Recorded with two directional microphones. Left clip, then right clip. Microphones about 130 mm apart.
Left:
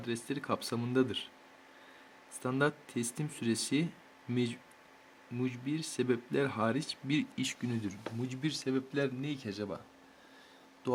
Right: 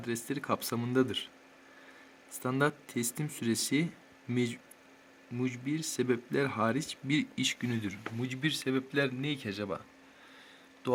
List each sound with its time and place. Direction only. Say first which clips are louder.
0.0 s speech: right 2 dB; 10° right (ahead or behind)
2.4 s speech: right 1 dB; 5° right (ahead or behind)